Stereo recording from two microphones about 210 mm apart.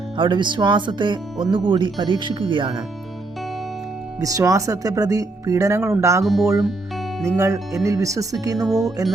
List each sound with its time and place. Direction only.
0.2 s speech: 20° right (ahead or behind)
4.2 s speech: 15° right (ahead or behind)
6.2 s speech: centre (ahead or behind)
7.3 s speech: 15° right (ahead or behind)
8.5 s speech: centre (ahead or behind)